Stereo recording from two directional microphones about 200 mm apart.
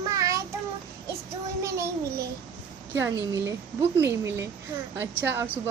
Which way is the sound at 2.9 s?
15° right (ahead or behind).